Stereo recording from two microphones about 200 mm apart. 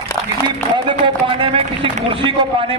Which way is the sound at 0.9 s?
25° right (ahead or behind).